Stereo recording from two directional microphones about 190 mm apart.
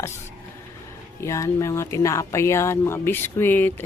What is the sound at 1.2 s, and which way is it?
Speech, 15° left (ahead or behind).